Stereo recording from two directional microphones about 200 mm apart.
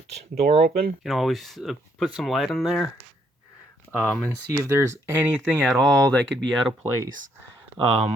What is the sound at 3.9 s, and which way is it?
Speech, 10° left (ahead or behind).